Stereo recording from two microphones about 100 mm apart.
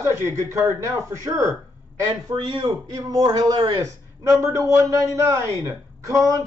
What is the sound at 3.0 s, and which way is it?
A man's voice, 35° right (ahead or behind).